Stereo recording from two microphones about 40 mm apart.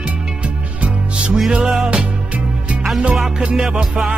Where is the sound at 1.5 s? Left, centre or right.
Centre.